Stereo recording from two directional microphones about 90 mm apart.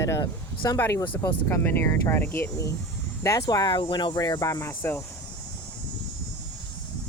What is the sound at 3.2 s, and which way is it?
Speech, 35° left (ahead or behind).